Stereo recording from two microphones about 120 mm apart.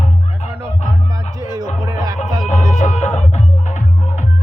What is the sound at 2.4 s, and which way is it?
Music, 75° left (ahead or behind).